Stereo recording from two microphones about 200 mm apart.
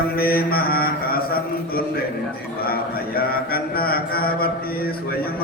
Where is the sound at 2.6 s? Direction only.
50° left (ahead or behind).